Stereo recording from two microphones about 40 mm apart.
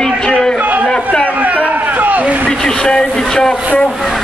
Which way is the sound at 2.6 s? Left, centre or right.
Left.